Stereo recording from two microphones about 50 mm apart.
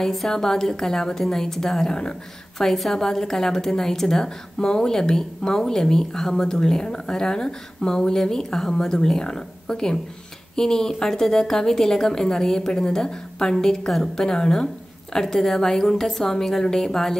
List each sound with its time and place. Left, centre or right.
0.0 s a woman's voice: centre